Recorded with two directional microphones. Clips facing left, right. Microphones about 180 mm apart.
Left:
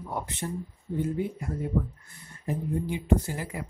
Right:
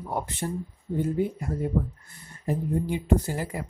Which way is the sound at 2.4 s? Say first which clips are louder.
Right 3 dB; 35° right (ahead or behind).